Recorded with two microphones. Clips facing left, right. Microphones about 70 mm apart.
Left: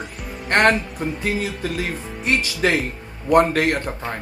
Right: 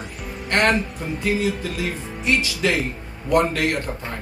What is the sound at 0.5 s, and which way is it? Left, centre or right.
Speech, left.